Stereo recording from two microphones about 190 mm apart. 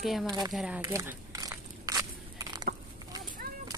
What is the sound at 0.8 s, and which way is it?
Walk, 15° right (ahead or behind).